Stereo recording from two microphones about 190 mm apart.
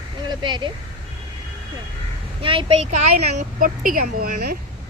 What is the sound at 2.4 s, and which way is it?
Speech, 30° right (ahead or behind).